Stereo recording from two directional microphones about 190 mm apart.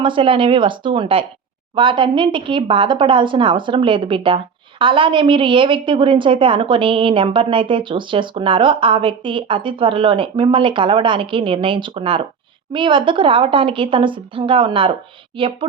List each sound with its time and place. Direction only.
0.0 s a woman's voice: 25° right (ahead or behind)